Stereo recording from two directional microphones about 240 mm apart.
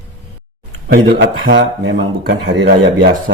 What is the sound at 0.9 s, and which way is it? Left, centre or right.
Speech, right.